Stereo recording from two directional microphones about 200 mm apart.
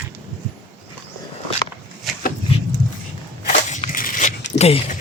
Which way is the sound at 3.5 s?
35° left (ahead or behind).